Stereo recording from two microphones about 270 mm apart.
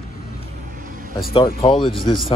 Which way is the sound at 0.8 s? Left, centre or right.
Right.